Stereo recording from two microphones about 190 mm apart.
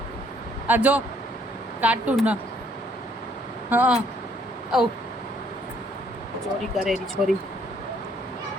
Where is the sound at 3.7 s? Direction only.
10° right (ahead or behind).